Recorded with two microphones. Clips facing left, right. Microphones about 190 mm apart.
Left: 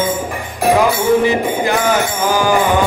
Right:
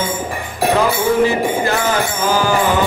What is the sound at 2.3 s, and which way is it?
Music, 15° left (ahead or behind).